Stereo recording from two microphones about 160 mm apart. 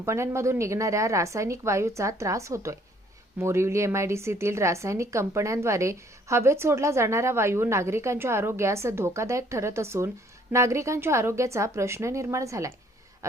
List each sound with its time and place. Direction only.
0.0 s speech: 15° right (ahead or behind)